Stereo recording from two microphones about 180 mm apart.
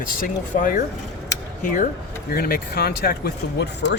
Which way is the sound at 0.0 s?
50° left (ahead or behind).